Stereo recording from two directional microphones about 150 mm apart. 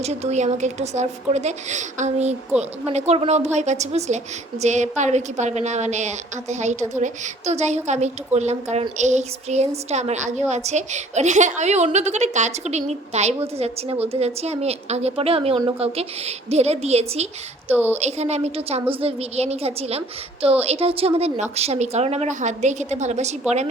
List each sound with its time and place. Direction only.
0.0 s a woman's voice: 50° right (ahead or behind)
17.7 s a woman's voice: 10° right (ahead or behind)
17.9 s a woman's voice: 45° right (ahead or behind)